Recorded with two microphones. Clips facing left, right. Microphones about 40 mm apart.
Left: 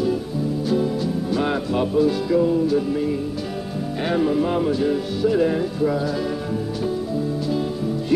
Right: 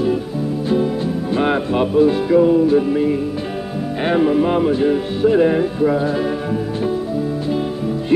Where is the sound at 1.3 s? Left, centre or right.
Right.